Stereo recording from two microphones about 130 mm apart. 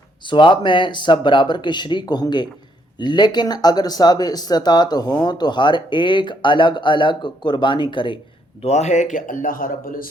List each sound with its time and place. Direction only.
0.3 s speech: 40° left (ahead or behind)
8.6 s a man's voice: 60° left (ahead or behind); by 10.1 s 90° left